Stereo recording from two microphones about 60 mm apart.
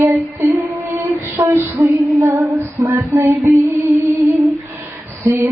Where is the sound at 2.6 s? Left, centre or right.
Right.